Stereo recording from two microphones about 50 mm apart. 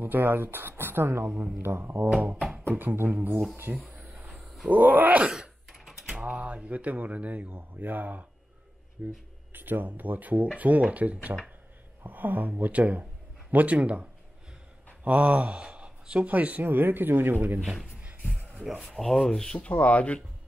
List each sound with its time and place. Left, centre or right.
0.0 s speech: right
2.5 s music: right
3.9 s a sound: right
4.3 s a sound: centre
4.6 s speech: right
5.3 s typing: centre
6.1 s speech: right
9.5 s speech: right
15.0 s speech: right
16.6 s speech: right
18.4 s a sound: right
18.8 s speech: centre
19.5 s speech: left